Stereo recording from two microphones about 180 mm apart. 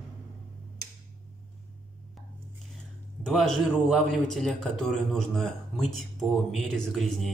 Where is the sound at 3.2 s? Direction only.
Centre (ahead or behind).